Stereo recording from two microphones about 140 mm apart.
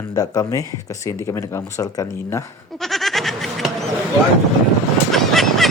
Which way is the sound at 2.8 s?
Centre (ahead or behind).